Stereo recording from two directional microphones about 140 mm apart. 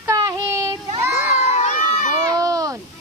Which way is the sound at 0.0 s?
25° right (ahead or behind).